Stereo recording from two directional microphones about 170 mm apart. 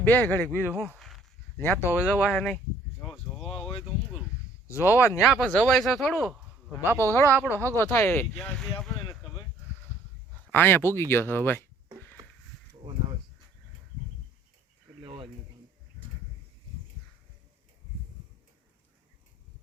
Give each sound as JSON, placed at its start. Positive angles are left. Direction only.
{"t": 0.0, "sound": "speech", "side_deg": 10}
{"t": 2.0, "sound": "speech", "side_deg": -5}
{"t": 3.1, "sound": "a sound", "side_deg": 0}
{"t": 4.7, "sound": "speech", "side_deg": 15}
{"t": 6.9, "sound": "speech", "side_deg": 15}
{"t": 8.4, "sound": "speech", "side_deg": 0}
{"t": 10.5, "sound": "speech", "side_deg": 10}
{"t": 12.8, "sound": "a sound", "side_deg": -30}
{"t": 15.0, "sound": "a sound", "side_deg": -30}